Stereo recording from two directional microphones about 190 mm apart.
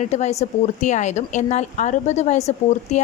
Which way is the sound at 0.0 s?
35° left (ahead or behind).